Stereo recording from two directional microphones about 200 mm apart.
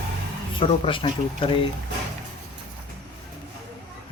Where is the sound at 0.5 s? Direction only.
25° left (ahead or behind).